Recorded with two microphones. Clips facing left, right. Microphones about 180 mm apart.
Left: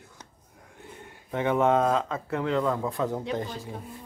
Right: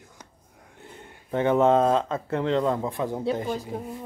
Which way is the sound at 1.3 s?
35° right (ahead or behind).